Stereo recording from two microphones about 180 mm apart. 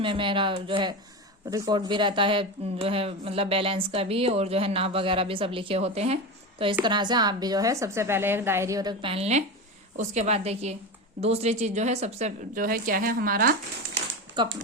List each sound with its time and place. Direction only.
0.0 s a woman's voice: 30° right (ahead or behind)
6.8 s a woman's voice: 25° right (ahead or behind); by 13.6 s 50° right (ahead or behind)
14.4 s a woman's voice: 25° right (ahead or behind)